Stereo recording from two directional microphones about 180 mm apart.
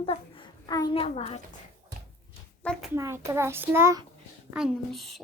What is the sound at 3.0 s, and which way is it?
A child's voice, 15° right (ahead or behind).